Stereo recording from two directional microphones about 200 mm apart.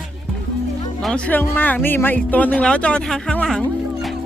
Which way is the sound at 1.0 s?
5° left (ahead or behind).